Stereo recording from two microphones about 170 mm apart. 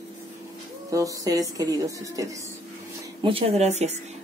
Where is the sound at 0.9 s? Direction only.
20° right (ahead or behind).